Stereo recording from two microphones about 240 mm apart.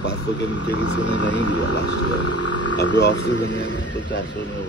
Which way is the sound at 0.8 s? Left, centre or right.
Left.